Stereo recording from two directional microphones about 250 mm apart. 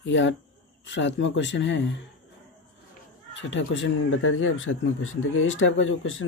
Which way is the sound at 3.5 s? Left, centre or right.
Left.